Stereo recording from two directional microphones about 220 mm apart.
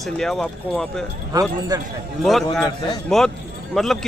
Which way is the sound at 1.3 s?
15° right (ahead or behind).